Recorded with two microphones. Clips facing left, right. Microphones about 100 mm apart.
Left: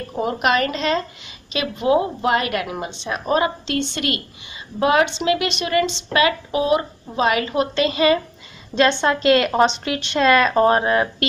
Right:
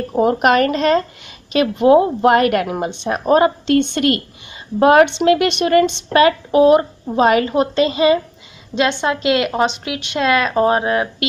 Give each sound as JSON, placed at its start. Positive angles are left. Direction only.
{"t": 0.2, "sound": "a woman's voice", "side_deg": -45}
{"t": 8.7, "sound": "speech", "side_deg": -10}